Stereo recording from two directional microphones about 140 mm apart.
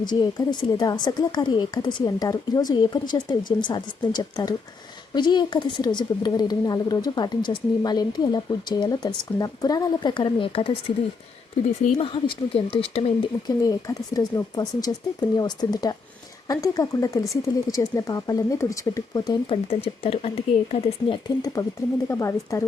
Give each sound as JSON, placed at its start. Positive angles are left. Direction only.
{"t": 0.1, "sound": "a woman's voice", "side_deg": 30}
{"t": 11.9, "sound": "speech", "side_deg": 40}
{"t": 13.6, "sound": "a woman's voice", "side_deg": 25}
{"t": 19.5, "sound": "speech", "side_deg": 40}
{"t": 21.2, "sound": "a woman's voice", "side_deg": 25}